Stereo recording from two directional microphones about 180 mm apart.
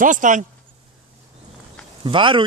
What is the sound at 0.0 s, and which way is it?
Speech, 45° right (ahead or behind).